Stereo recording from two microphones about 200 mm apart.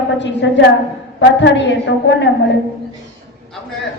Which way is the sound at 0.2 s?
65° left (ahead or behind).